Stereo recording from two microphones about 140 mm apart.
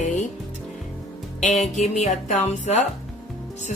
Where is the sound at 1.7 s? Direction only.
60° left (ahead or behind).